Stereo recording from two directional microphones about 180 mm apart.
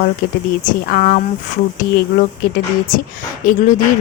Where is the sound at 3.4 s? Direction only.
50° left (ahead or behind).